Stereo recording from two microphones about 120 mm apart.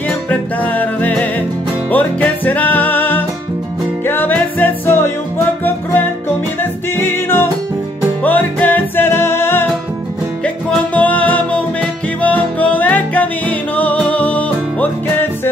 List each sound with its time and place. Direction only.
0.3 s music: 15° left (ahead or behind)
6.6 s music: 20° left (ahead or behind)